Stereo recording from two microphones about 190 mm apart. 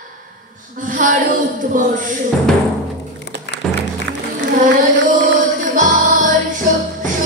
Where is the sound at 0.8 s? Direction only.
45° right (ahead or behind).